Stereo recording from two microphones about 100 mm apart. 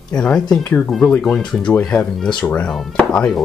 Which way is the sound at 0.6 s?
20° left (ahead or behind).